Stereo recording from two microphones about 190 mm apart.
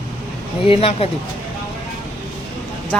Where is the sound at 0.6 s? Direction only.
30° left (ahead or behind).